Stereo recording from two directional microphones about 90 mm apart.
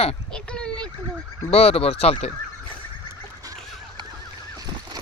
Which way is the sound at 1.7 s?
90° left.